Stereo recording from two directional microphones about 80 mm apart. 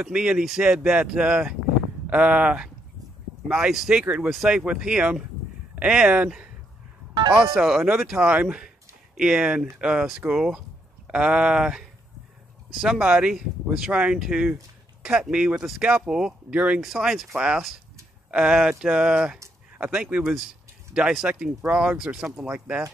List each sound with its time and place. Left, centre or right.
0.0 s speech: centre
16.8 s speech: centre